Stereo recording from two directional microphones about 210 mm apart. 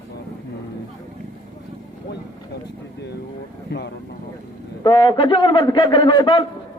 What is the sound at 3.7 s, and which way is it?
Vehicle, 50° left (ahead or behind).